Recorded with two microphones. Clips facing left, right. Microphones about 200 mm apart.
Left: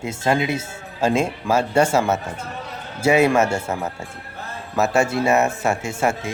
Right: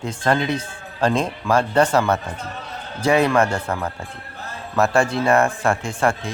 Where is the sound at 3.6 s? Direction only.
25° left (ahead or behind).